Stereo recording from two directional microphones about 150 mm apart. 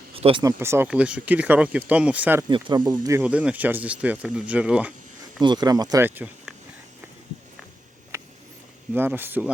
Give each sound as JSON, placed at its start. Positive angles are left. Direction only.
{"t": 0.1, "sound": "a sound", "side_deg": -40}
{"t": 0.4, "sound": "speech", "side_deg": -20}
{"t": 0.9, "sound": "speech", "side_deg": -5}
{"t": 2.5, "sound": "speech", "side_deg": -30}
{"t": 3.2, "sound": "speech", "side_deg": -10}
{"t": 5.4, "sound": "speech", "side_deg": -30}
{"t": 6.1, "sound": "speech", "side_deg": -10}
{"t": 8.1, "sound": "a sound", "side_deg": -20}
{"t": 8.9, "sound": "speech", "side_deg": -15}